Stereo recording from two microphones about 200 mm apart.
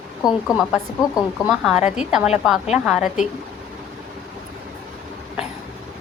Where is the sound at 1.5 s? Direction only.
Centre (ahead or behind).